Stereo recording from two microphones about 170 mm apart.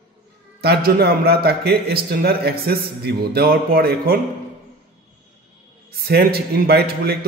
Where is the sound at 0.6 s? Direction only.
65° right (ahead or behind).